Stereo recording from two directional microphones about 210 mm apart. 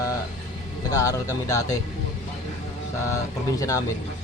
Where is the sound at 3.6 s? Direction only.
15° left (ahead or behind).